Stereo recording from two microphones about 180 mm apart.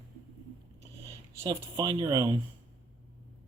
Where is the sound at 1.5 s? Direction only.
25° right (ahead or behind).